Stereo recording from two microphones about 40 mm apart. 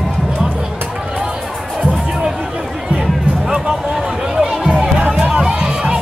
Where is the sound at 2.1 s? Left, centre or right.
Centre.